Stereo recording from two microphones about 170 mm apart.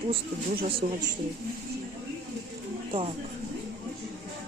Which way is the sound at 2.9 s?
30° right (ahead or behind).